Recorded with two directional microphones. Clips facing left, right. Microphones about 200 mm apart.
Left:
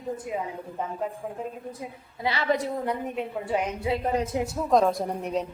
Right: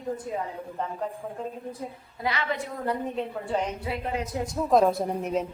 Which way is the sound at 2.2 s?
35° left (ahead or behind).